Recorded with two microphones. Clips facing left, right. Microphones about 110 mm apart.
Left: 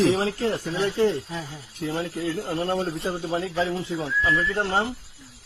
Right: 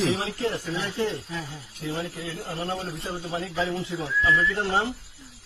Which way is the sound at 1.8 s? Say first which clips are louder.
Left 4 dB; 50° left (ahead or behind).